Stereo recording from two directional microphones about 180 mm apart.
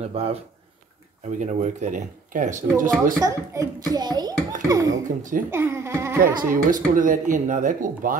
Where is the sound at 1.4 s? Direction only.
40° right (ahead or behind).